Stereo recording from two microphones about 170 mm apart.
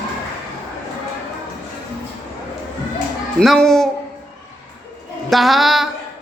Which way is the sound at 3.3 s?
5° left (ahead or behind).